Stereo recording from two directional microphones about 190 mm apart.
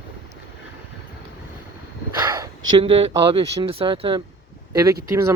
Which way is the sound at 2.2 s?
20° right (ahead or behind).